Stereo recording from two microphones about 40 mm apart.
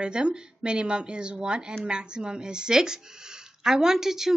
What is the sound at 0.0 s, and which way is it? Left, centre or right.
A woman's voice, right.